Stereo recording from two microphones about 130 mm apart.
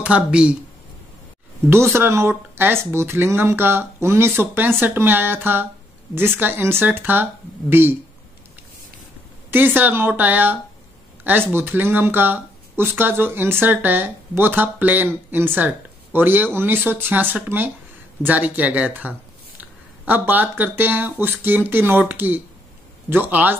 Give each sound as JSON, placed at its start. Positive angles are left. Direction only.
{"t": 0.0, "sound": "speech", "side_deg": -10}
{"t": 1.7, "sound": "speech", "side_deg": -20}
{"t": 9.5, "sound": "speech", "side_deg": -15}